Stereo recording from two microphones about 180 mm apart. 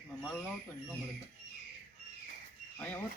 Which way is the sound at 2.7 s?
10° left (ahead or behind).